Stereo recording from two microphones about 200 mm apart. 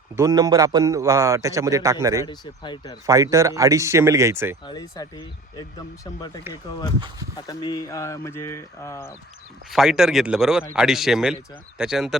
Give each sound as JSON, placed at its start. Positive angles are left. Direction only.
{"t": 0.2, "sound": "a man's voice", "side_deg": -15}
{"t": 2.2, "sound": "speech", "side_deg": 20}
{"t": 3.1, "sound": "a man's voice", "side_deg": -15}
{"t": 4.6, "sound": "speech", "side_deg": 20}
{"t": 9.6, "sound": "speech", "side_deg": 0}